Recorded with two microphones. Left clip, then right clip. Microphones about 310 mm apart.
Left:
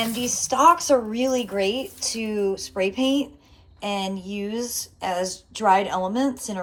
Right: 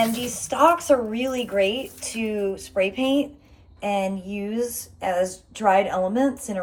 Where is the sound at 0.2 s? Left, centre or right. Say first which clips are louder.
Left 1 dB; centre.